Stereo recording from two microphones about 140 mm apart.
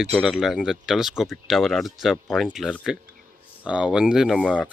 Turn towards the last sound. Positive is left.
turn(degrees=10)  # may be behind; listen again after turning